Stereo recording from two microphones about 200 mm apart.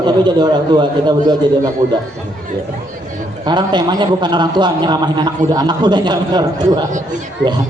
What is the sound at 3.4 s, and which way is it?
A man's voice, 20° right (ahead or behind).